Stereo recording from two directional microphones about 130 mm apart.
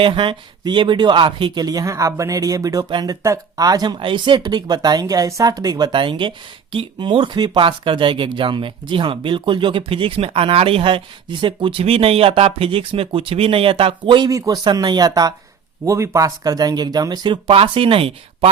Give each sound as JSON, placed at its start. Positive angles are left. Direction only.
{"t": 0.0, "sound": "speech", "side_deg": -40}
{"t": 14.3, "sound": "speech", "side_deg": -25}